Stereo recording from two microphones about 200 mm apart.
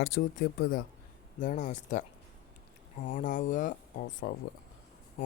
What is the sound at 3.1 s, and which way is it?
Speech, 40° left (ahead or behind).